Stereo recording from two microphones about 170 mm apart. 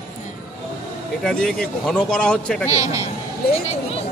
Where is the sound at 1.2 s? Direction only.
5° left (ahead or behind).